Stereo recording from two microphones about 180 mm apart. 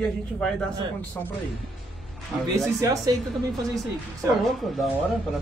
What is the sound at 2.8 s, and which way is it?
Speech, 20° right (ahead or behind).